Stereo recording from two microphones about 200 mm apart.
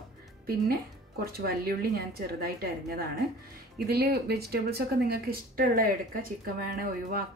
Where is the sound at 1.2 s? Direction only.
50° right (ahead or behind).